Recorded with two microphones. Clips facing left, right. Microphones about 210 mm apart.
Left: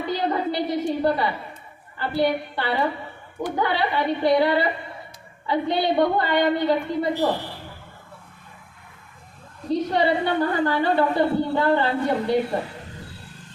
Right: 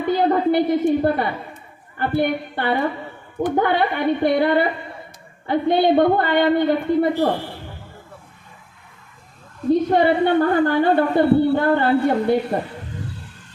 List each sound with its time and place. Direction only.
0.1 s a sound: 55° right (ahead or behind)
2.0 s a woman's voice: 55° right (ahead or behind)
9.6 s a woman's voice: 50° right (ahead or behind)